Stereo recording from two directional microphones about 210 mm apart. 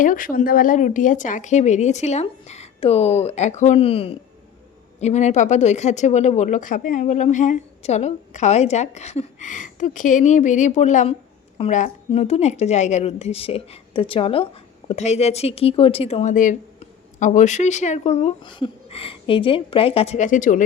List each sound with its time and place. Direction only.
0.0 s a woman's voice: 40° left (ahead or behind)